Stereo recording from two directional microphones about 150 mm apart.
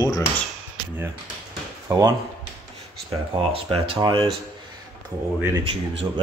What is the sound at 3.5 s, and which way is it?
Speech, 40° right (ahead or behind).